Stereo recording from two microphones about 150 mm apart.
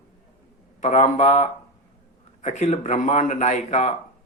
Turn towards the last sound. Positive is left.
turn(degrees=50)  # may be behind; listen again after turning